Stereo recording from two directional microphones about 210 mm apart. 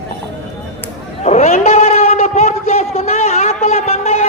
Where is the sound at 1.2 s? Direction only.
30° left (ahead or behind).